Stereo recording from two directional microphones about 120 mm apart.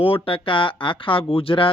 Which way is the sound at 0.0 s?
50° left (ahead or behind).